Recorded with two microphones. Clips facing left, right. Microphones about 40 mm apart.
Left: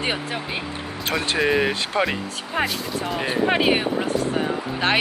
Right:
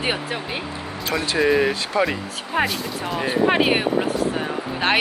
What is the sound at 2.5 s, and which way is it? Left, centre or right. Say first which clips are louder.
Speech: right 2 dB; centre.